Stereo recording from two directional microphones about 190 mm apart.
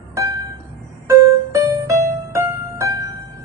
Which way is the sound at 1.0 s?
15° right (ahead or behind).